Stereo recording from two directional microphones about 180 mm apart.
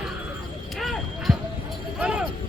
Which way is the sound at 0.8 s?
Centre (ahead or behind).